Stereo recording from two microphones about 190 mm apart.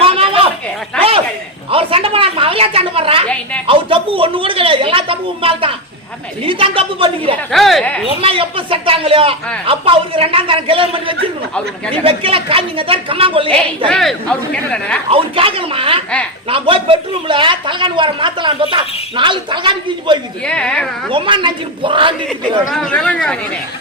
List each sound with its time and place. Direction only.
0.0 s a sound: 30° right (ahead or behind)
1.7 s a sound: 30° right (ahead or behind)
7.5 s speech: centre (ahead or behind)
8.2 s a woman's voice: 30° right (ahead or behind)
13.5 s a woman's voice: 5° left (ahead or behind)
15.1 s a woman's voice: 30° right (ahead or behind)
20.4 s a woman's voice: 5° left (ahead or behind)
21.1 s a woman's voice: 25° right (ahead or behind)
22.7 s a woman's voice: 5° left (ahead or behind)